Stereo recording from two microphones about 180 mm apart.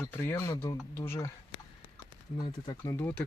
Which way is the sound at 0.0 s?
10° left (ahead or behind).